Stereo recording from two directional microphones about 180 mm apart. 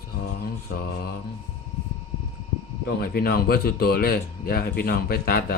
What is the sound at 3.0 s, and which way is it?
Speech, 55° left (ahead or behind).